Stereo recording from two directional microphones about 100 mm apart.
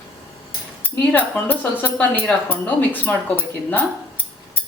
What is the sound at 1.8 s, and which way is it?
Speech, 15° left (ahead or behind).